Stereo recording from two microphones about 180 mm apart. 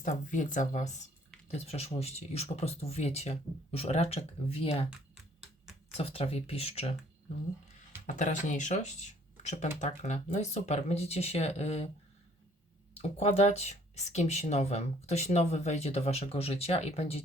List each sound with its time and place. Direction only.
0.0 s speech: 45° left (ahead or behind)
6.0 s speech: 35° left (ahead or behind)
8.0 s speech: 45° left (ahead or behind)
13.0 s speech: 35° left (ahead or behind)